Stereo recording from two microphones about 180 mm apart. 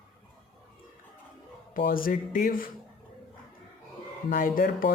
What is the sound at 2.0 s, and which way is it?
Speech, 50° left (ahead or behind).